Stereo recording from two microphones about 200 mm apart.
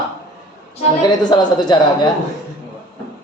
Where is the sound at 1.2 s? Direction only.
20° left (ahead or behind).